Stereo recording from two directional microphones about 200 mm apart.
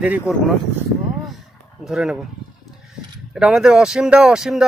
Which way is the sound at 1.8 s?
Centre (ahead or behind).